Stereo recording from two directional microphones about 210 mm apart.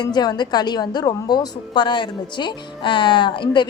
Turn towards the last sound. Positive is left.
turn(degrees=20)  # may be behind; listen again after turning